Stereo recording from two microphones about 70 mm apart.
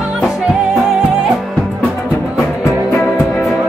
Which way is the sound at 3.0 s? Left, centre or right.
Left.